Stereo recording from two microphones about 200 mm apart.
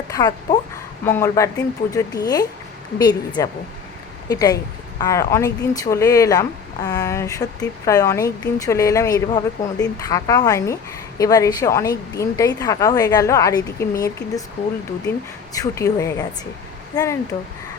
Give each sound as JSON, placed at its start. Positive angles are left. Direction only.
{"t": 0.1, "sound": "a sound", "side_deg": 20}
{"t": 1.0, "sound": "a woman's voice", "side_deg": 10}
{"t": 15.5, "sound": "speech", "side_deg": 15}